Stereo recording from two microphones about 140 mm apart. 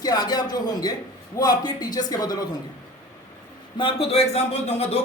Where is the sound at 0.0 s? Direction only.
30° left (ahead or behind).